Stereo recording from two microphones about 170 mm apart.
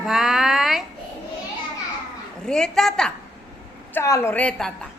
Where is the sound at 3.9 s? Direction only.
15° left (ahead or behind).